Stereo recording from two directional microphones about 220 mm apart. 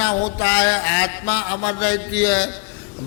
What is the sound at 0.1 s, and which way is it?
Speech, 15° left (ahead or behind).